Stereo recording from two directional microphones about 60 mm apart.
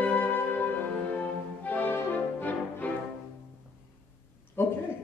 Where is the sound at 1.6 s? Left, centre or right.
Left.